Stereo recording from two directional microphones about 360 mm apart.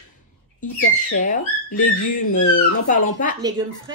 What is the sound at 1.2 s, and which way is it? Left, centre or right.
A woman's voice, left.